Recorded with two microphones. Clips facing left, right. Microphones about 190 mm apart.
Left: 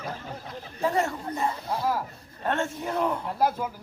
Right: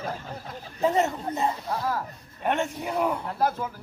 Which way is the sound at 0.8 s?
20° right (ahead or behind).